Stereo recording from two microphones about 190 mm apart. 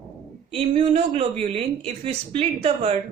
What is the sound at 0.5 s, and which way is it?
A woman's voice, 35° right (ahead or behind).